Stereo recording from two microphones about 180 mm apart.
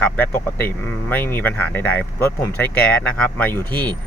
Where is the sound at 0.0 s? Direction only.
10° left (ahead or behind).